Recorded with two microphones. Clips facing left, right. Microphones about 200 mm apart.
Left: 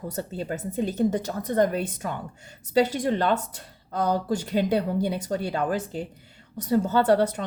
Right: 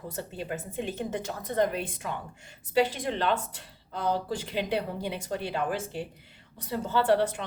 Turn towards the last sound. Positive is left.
turn(degrees=40)  # may be behind; listen again after turning